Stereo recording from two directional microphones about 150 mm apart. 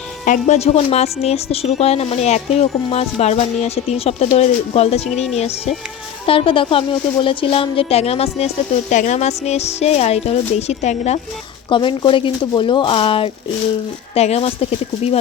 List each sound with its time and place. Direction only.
0.3 s a woman's voice: 50° left (ahead or behind)
11.7 s a woman's voice: 30° left (ahead or behind)